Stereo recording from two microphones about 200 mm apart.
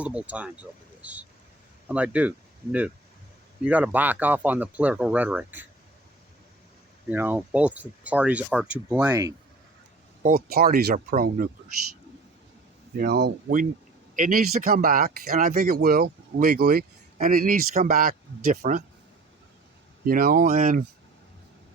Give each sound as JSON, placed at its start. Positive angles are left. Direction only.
{"t": 0.0, "sound": "speech", "side_deg": -5}
{"t": 3.6, "sound": "speech", "side_deg": -5}
{"t": 7.1, "sound": "speech", "side_deg": -10}
{"t": 9.0, "sound": "speech", "side_deg": -20}
{"t": 10.2, "sound": "speech", "side_deg": -50}
{"t": 13.0, "sound": "speech", "side_deg": -55}
{"t": 20.1, "sound": "speech", "side_deg": -45}